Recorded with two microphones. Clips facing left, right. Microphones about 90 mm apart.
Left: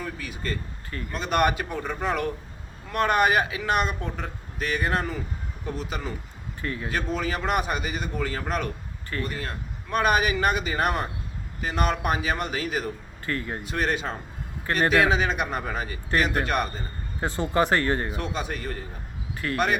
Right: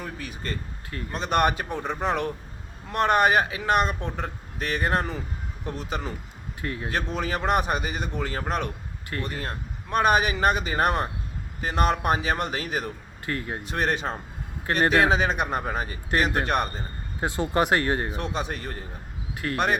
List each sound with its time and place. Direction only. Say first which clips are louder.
0.0 s speech: left 1 dB; 35° right (ahead or behind)
6.6 s speech: even; 50° right (ahead or behind)
6.9 s speech: even; 35° right (ahead or behind)
13.2 s speech: even; 55° right (ahead or behind)
13.7 s a man's voice: right 1 dB; 35° right (ahead or behind)
17.6 s speech: even; 60° right (ahead or behind)
18.1 s speech: right 1 dB; 30° right (ahead or behind)